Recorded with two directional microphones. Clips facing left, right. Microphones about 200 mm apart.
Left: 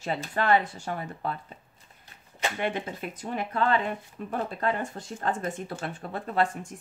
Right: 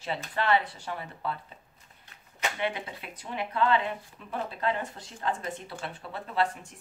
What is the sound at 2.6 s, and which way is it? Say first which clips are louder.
Speech: left 3 dB; 45° left (ahead or behind).